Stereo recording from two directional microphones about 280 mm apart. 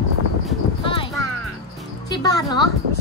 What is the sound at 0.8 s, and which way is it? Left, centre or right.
Clip-clop, centre.